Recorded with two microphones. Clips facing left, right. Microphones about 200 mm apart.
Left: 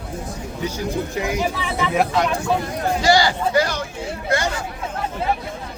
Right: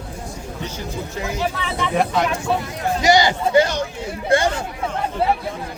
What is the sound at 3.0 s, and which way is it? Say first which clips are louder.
Speech: right 2 dB; 20° right (ahead or behind).